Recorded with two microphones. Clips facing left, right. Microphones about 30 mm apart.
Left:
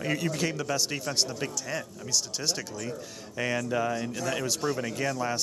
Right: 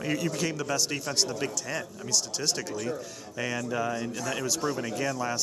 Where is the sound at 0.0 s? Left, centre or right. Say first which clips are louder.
Even; centre.